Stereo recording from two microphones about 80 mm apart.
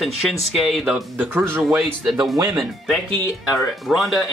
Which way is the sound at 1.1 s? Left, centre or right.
Right.